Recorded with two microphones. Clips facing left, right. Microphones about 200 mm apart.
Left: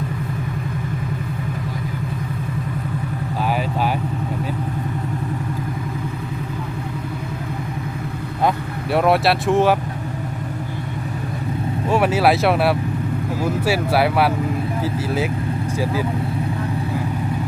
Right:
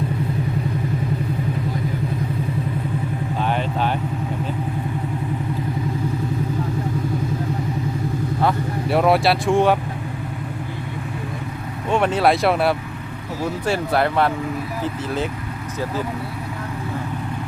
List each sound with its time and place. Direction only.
8.9 s speech: centre (ahead or behind)
11.9 s speech: 5° left (ahead or behind)